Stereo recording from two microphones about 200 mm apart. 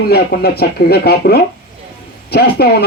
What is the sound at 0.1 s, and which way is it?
Speech, 50° left (ahead or behind).